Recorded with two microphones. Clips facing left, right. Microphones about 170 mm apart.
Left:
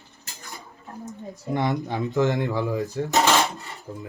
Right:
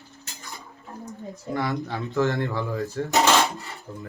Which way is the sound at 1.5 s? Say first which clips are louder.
Left 3 dB; 20° left (ahead or behind).